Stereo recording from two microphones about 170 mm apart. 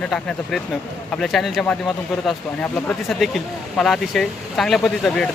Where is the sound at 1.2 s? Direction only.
Centre (ahead or behind).